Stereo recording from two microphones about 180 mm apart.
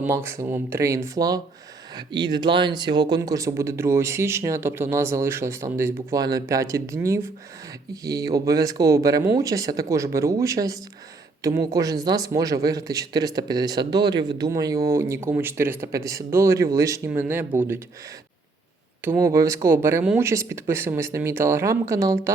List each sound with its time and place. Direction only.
0.0 s speech: 15° right (ahead or behind)
19.0 s speech: 15° right (ahead or behind)